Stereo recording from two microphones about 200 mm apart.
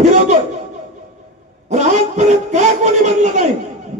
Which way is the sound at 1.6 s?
35° right (ahead or behind).